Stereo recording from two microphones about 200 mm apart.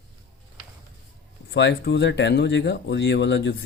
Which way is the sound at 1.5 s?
60° left (ahead or behind).